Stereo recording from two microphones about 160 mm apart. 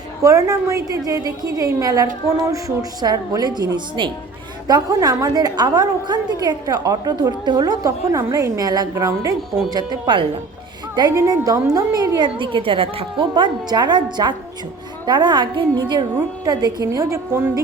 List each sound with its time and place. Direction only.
0.2 s a woman's voice: 20° right (ahead or behind)